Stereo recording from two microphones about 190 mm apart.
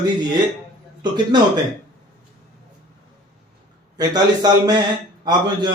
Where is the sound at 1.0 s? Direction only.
25° right (ahead or behind).